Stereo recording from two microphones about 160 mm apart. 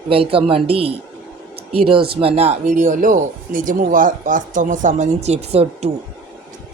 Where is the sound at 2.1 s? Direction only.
35° right (ahead or behind).